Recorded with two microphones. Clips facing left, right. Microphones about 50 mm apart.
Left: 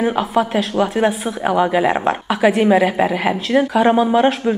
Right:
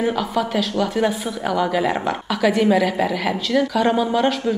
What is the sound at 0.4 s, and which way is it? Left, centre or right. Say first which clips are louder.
A woman's voice: left 5 dB; left.